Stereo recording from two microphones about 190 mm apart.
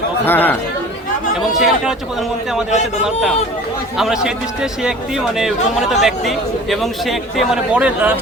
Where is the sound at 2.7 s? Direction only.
40° left (ahead or behind).